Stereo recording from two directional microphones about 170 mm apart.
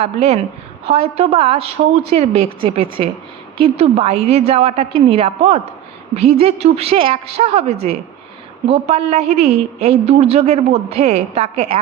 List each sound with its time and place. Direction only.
0.0 s a woman's voice: 40° right (ahead or behind)